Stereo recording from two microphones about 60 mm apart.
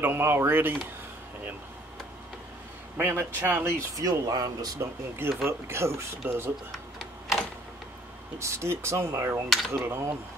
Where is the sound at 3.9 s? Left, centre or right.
Right.